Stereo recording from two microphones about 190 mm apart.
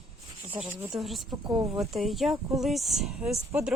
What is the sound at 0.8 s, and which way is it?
A woman's voice, centre (ahead or behind).